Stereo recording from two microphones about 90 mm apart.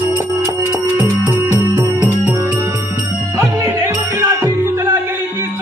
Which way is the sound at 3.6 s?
30° right (ahead or behind).